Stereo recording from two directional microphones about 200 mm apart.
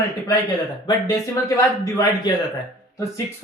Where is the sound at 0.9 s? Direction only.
15° left (ahead or behind).